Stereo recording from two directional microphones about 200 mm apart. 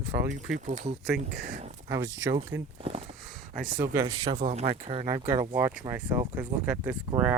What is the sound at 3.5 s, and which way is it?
Speech, 45° right (ahead or behind).